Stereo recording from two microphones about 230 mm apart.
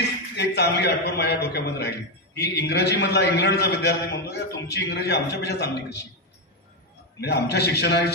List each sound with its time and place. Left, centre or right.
0.4 s a man's voice: left
7.2 s a man's voice: left